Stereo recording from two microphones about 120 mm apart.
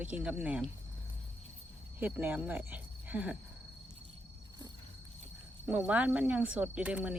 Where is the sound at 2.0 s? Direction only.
15° right (ahead or behind).